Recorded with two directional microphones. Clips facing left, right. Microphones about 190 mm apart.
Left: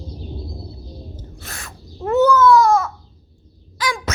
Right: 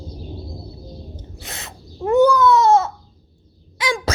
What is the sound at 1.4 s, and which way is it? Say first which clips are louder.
Owl: right 2 dB; 20° right (ahead or behind).